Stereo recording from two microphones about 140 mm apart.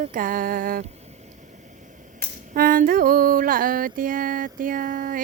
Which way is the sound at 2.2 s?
90° right.